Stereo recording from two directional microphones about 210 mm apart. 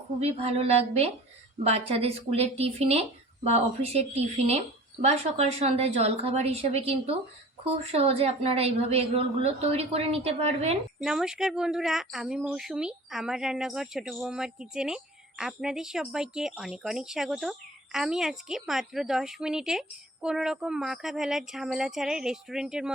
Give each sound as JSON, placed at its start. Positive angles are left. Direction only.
{"t": 0.2, "sound": "speech", "side_deg": -30}
{"t": 11.0, "sound": "speech", "side_deg": 0}